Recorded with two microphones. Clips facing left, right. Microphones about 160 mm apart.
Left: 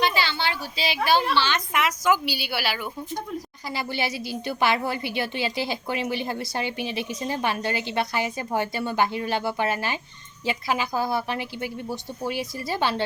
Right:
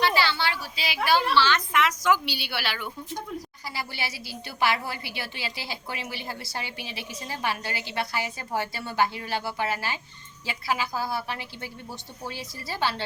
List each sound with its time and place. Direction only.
0.0 s a sound: 20° left (ahead or behind)
1.4 s a woman's voice: 15° left (ahead or behind)
3.7 s a woman's voice: 20° left (ahead or behind)